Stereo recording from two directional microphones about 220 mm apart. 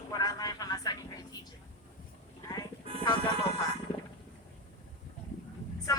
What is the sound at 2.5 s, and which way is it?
Music, 15° left (ahead or behind).